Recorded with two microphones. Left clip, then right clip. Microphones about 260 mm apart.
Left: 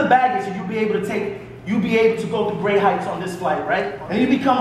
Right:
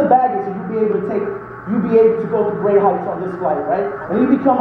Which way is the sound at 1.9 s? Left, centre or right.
Left.